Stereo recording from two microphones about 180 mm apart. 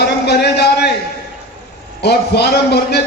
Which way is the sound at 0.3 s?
65° left (ahead or behind).